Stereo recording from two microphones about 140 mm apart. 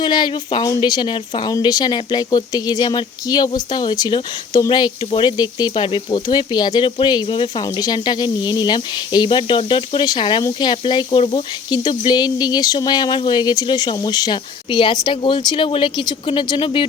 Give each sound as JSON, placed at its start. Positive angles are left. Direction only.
{"t": 0.0, "sound": "speech", "side_deg": 35}
{"t": 7.6, "sound": "speech", "side_deg": 30}